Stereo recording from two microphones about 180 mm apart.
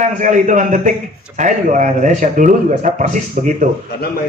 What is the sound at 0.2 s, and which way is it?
Speech, 45° right (ahead or behind).